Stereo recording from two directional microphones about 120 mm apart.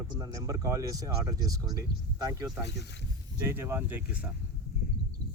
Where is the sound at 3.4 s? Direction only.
20° right (ahead or behind).